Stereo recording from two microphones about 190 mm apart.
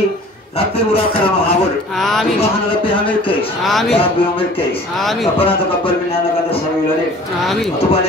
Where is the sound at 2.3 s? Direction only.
30° left (ahead or behind).